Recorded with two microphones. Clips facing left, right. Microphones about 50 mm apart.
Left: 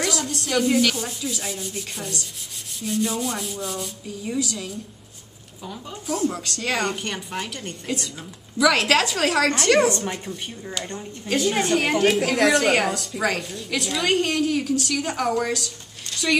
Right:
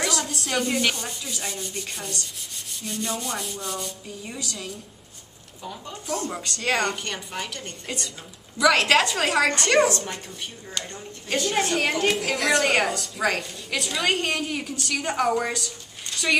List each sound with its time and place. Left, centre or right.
0.0 s a sound: centre
0.9 s a woman's voice: centre
9.8 s speech: left
10.1 s a woman's voice: centre